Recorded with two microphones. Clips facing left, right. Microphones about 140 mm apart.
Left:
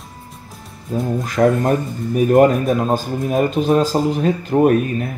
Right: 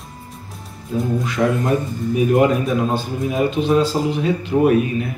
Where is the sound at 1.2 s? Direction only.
45° left (ahead or behind).